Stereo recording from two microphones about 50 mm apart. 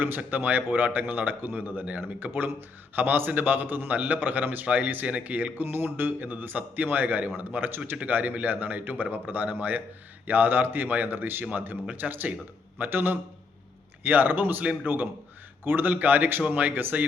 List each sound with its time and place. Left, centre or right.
0.0 s speech: right
5.6 s a man's voice: right